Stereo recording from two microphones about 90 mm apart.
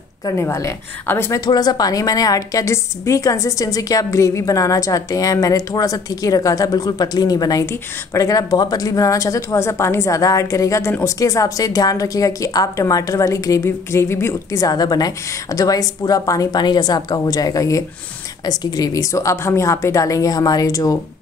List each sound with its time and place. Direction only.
0.2 s a woman's voice: 35° left (ahead or behind)
1.4 s a woman's voice: 50° left (ahead or behind)